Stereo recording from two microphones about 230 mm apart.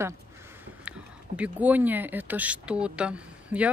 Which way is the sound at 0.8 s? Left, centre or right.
Centre.